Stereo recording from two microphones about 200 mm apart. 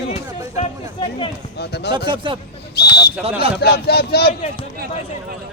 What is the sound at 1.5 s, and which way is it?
Speech, 55° left (ahead or behind).